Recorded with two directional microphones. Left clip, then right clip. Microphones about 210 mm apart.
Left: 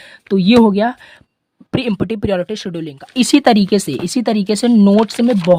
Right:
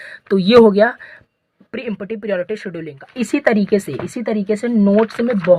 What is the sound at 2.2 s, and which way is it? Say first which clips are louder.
Speech: left 2 dB; 50° left (ahead or behind).